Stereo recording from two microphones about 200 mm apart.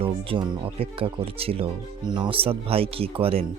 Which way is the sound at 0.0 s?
25° right (ahead or behind).